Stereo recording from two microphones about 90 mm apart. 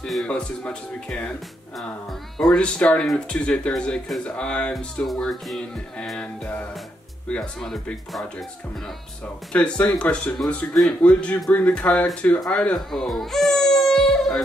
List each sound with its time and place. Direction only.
0.0 s speech: 5° left (ahead or behind)
2.3 s speech: 5° left (ahead or behind)
4.7 s music: centre (ahead or behind)
7.2 s speech: 10° left (ahead or behind)
9.5 s speech: 15° left (ahead or behind)
12.7 s baby cry: 5° left (ahead or behind)